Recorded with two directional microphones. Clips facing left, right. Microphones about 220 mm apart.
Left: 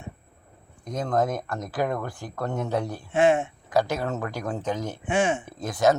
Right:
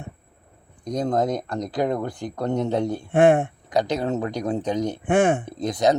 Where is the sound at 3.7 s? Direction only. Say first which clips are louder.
Right 2 dB; 20° right (ahead or behind).